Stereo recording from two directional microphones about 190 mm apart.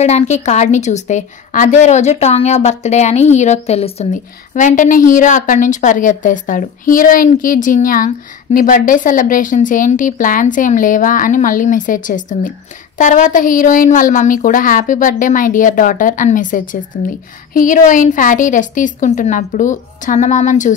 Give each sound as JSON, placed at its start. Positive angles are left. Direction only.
{"t": 0.0, "sound": "a woman's voice", "side_deg": 35}